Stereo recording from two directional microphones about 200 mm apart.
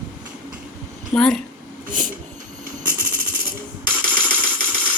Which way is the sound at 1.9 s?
40° right (ahead or behind).